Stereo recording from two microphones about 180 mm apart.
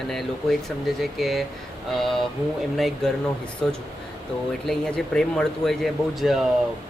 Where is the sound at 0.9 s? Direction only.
Centre (ahead or behind).